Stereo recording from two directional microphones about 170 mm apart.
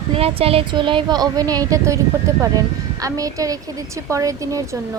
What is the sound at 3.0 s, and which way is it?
Speech, 20° right (ahead or behind).